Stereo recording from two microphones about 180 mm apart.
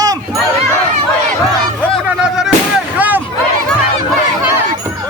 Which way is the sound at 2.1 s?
5° right (ahead or behind).